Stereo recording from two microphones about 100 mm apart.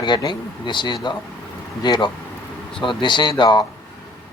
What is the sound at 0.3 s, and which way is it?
Speech, 50° left (ahead or behind).